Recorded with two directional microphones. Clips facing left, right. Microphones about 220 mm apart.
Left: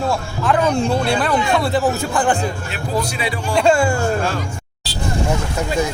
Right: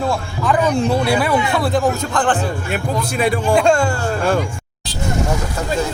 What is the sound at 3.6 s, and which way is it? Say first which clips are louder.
Speech: left 3 dB; 5° left (ahead or behind).